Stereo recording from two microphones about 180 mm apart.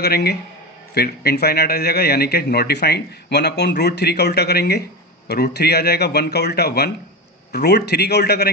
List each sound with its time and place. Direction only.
0.0 s a man's voice: 65° left (ahead or behind)